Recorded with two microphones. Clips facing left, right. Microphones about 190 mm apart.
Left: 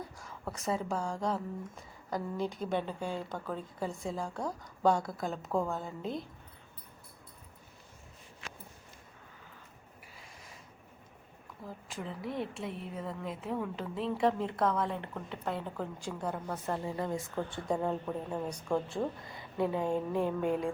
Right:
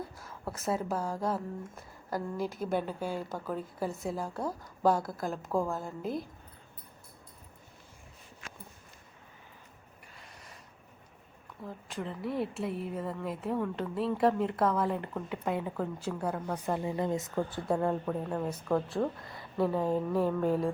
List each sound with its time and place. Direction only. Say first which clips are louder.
0.2 s speech: right 1 dB; 5° right (ahead or behind)
10.2 s a sound: right 1 dB; centre (ahead or behind)
11.6 s speech: right 3 dB; centre (ahead or behind)
16.6 s speech: right 3 dB; 15° right (ahead or behind)
17.7 s speech: right 4 dB; 5° left (ahead or behind)
18.4 s speech: right 2 dB; 5° right (ahead or behind)